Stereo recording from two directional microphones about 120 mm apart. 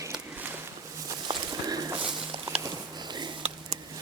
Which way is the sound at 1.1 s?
35° right (ahead or behind).